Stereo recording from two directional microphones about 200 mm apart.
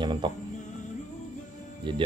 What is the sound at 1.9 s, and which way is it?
Speech, 25° right (ahead or behind).